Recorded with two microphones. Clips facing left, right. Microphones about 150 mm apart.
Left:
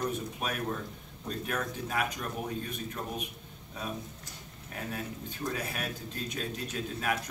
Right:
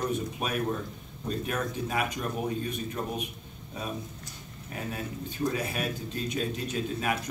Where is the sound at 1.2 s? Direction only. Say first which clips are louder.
Right 3 dB; 10° right (ahead or behind).